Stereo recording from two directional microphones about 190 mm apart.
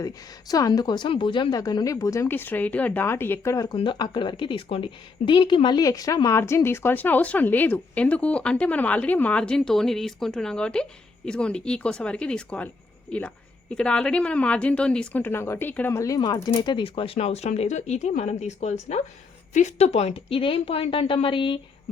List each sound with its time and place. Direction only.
0.0 s a woman's voice: 20° left (ahead or behind)